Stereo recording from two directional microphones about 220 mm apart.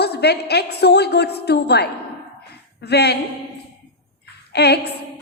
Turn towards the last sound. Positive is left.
turn(degrees=50)  # may be behind; listen again after turning